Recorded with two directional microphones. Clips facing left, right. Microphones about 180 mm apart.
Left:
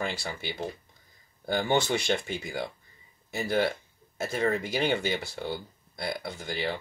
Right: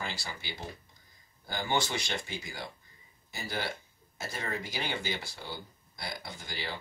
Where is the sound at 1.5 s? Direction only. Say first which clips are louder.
Left 6 dB; 60° left (ahead or behind).